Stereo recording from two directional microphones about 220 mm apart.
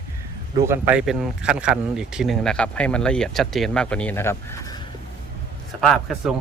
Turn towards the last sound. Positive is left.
turn(degrees=0)  # may be behind; listen again after turning